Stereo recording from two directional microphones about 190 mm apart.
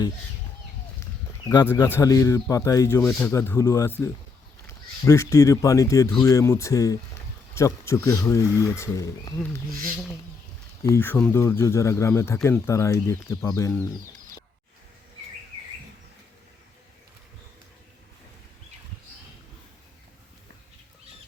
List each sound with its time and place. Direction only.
2.0 s speech: 15° left (ahead or behind)
3.1 s speech: 5° left (ahead or behind)
10.8 s speech: 10° left (ahead or behind)